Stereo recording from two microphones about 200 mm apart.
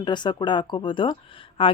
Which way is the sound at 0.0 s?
20° left (ahead or behind).